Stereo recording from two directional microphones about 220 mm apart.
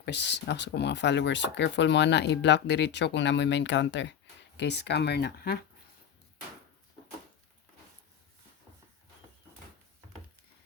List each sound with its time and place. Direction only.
0.0 s speech: 50° left (ahead or behind)